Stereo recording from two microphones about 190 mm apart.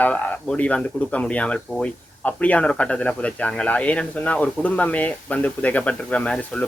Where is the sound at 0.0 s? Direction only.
5° left (ahead or behind).